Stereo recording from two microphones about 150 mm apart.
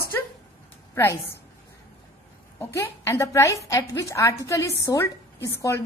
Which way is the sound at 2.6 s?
20° left (ahead or behind).